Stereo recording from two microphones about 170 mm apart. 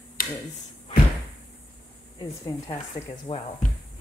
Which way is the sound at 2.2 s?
25° left (ahead or behind).